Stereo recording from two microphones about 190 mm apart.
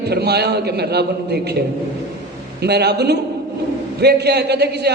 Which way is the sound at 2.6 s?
60° right (ahead or behind).